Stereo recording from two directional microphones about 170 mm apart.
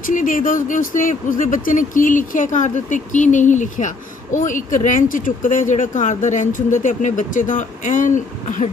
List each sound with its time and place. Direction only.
0.0 s speech: 55° left (ahead or behind)